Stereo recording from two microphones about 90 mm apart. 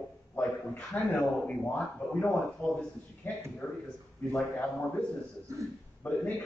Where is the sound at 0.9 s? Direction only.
15° left (ahead or behind).